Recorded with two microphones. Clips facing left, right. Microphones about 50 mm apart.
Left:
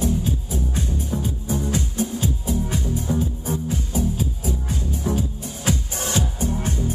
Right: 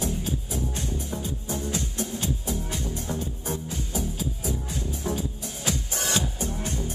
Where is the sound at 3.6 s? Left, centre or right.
Left.